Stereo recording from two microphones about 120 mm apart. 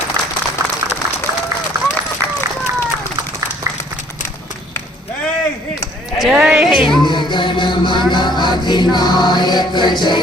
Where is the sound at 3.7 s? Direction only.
25° right (ahead or behind).